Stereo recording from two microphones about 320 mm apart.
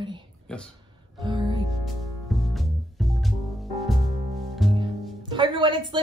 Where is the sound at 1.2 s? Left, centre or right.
Centre.